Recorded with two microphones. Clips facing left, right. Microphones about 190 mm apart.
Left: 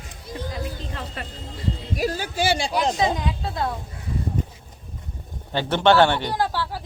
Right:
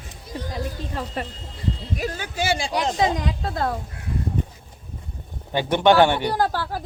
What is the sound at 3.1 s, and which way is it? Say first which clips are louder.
Speech: right 1 dB; 40° right (ahead or behind).